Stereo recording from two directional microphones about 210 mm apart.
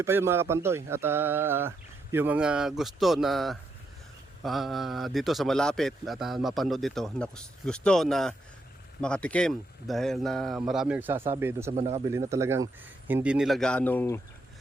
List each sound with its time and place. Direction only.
0.0 s a man's voice: 10° right (ahead or behind)
11.7 s speech: 30° right (ahead or behind)
12.0 s a man's voice: 15° right (ahead or behind); by 14.2 s 10° left (ahead or behind)